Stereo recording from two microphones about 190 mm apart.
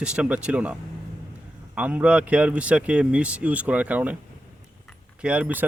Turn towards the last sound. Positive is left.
turn(degrees=-10)  # may be behind; listen again after turning